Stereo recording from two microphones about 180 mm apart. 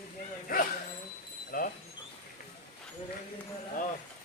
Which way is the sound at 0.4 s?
50° left (ahead or behind).